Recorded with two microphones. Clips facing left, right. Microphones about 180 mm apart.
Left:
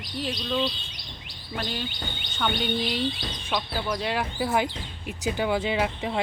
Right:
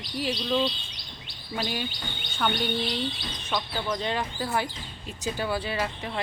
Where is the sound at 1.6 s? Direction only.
10° right (ahead or behind).